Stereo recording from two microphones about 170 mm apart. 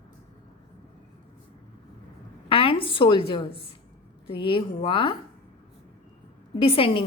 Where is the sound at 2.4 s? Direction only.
30° left (ahead or behind).